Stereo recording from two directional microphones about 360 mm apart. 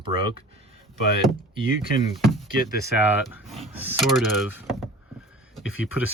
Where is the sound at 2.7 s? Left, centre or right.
Centre.